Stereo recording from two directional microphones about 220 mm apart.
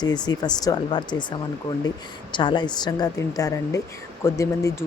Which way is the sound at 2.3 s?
20° left (ahead or behind).